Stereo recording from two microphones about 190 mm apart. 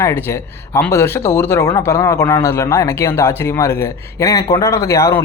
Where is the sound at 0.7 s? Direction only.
15° left (ahead or behind).